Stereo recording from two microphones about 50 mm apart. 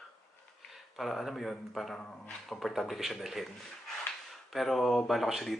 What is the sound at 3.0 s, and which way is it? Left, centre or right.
Speech, centre.